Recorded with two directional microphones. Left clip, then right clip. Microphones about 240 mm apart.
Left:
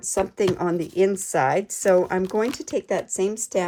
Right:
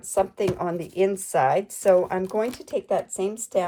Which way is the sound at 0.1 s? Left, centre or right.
Left.